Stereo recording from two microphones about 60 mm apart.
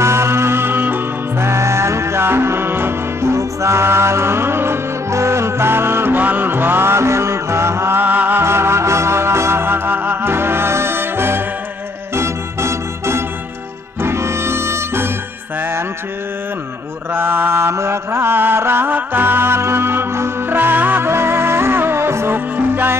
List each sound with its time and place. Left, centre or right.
0.0 s music: right
1.5 s music: right
8.0 s music: right
8.4 s music: right
17.1 s mantra: right